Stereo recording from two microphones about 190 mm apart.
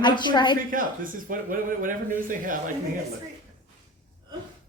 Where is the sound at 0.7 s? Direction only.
45° right (ahead or behind).